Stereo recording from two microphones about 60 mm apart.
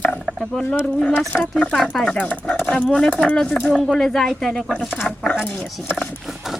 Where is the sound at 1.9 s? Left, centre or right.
Centre.